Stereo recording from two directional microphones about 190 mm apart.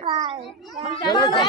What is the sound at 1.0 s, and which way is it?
Speech, 20° left (ahead or behind).